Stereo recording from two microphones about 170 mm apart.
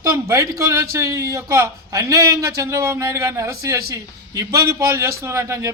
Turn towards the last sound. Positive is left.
turn(degrees=-15)  # may be behind; listen again after turning